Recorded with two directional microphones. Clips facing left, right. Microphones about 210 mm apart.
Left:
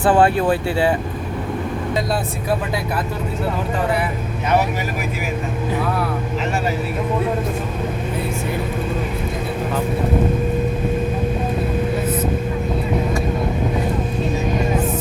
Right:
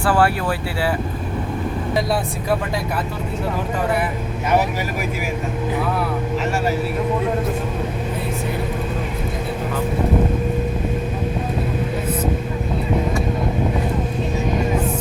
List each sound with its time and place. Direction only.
0.0 s speech: 20° left (ahead or behind)